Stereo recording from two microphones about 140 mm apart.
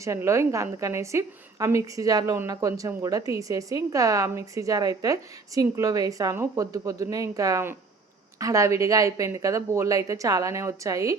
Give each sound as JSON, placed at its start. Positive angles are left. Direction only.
{"t": 0.0, "sound": "a woman's voice", "side_deg": -20}